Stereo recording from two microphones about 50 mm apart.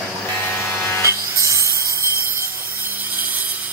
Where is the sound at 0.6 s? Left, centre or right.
Left.